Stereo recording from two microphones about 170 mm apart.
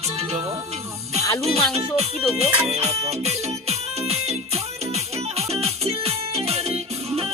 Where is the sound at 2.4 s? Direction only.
35° right (ahead or behind).